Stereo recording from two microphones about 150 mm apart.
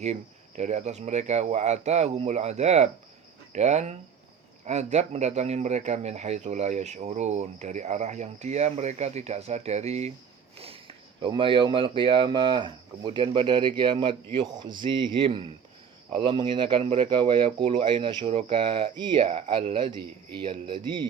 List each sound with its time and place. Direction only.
0.0 s speech: 50° right (ahead or behind); by 21.1 s 30° right (ahead or behind)